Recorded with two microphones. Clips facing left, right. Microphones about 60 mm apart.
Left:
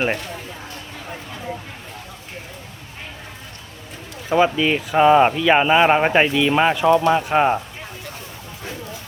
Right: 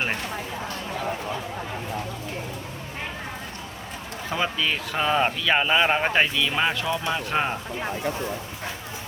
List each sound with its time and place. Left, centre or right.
4.3 s speech: centre